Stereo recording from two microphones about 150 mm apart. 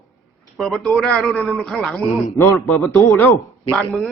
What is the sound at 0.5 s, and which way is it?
Speech, centre (ahead or behind).